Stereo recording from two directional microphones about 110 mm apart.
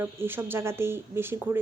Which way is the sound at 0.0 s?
20° right (ahead or behind).